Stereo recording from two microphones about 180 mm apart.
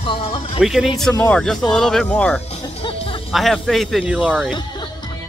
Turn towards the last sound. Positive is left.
turn(degrees=-5)  # may be behind; listen again after turning